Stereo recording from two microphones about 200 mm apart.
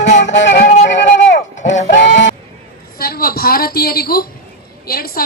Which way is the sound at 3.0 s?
50° left (ahead or behind).